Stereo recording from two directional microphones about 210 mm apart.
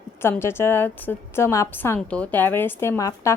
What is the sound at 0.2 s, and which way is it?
A woman's voice, 10° left (ahead or behind).